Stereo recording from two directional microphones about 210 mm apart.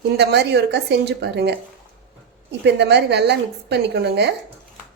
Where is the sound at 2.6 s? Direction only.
55° right (ahead or behind).